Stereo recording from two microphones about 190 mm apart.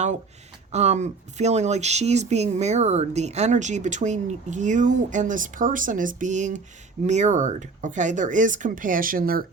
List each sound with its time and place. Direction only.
0.7 s speech: 35° right (ahead or behind)